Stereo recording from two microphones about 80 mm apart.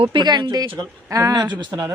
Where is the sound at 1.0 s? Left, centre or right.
Right.